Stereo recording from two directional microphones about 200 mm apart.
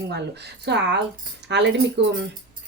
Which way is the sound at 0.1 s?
60° right (ahead or behind).